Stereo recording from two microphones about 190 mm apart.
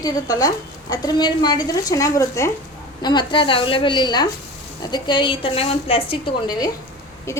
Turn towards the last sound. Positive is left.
turn(degrees=15)  # may be behind; listen again after turning